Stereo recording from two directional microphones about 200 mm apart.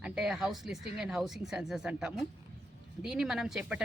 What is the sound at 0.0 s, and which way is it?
A woman's voice, 5° right (ahead or behind).